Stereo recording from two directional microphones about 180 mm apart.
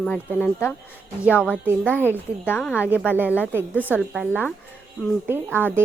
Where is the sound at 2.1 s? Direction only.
10° left (ahead or behind).